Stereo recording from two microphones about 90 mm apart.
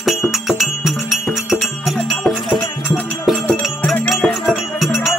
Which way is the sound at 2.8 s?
15° left (ahead or behind).